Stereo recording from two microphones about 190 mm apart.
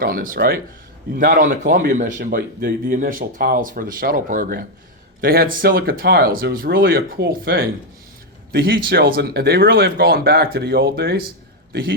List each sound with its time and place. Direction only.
0.0 s a man's voice: 50° right (ahead or behind)